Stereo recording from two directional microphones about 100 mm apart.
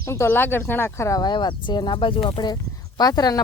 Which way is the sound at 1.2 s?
50° left (ahead or behind).